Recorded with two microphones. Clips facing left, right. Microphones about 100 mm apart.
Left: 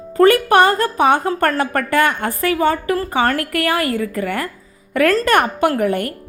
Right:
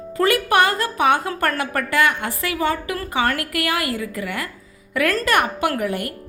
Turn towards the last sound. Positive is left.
turn(degrees=50)  # may be behind; listen again after turning